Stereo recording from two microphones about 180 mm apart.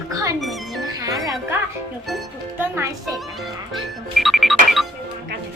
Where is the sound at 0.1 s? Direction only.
20° right (ahead or behind).